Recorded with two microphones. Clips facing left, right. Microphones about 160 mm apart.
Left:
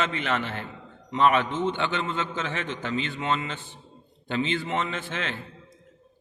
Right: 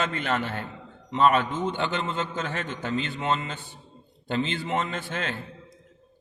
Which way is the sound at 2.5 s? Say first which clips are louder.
Even; 40° right (ahead or behind).